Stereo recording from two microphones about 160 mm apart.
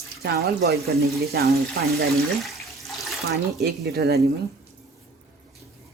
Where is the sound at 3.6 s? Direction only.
90° right.